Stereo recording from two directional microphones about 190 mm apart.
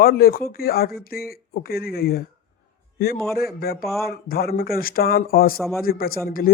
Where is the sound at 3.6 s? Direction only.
55° left (ahead or behind).